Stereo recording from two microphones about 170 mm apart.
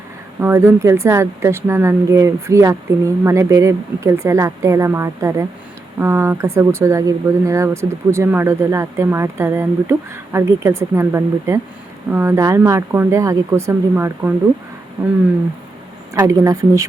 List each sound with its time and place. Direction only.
0.3 s speech: 15° right (ahead or behind)
16.1 s speech: 20° right (ahead or behind)